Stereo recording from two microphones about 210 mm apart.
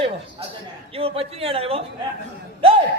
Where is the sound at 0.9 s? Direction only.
25° right (ahead or behind).